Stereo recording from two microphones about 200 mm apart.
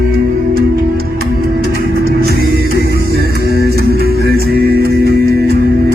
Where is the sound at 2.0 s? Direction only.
50° right (ahead or behind).